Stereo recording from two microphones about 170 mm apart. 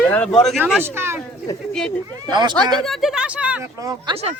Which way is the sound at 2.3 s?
25° right (ahead or behind).